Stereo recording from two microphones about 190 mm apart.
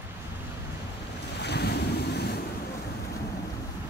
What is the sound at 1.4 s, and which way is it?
Waves, 60° left (ahead or behind).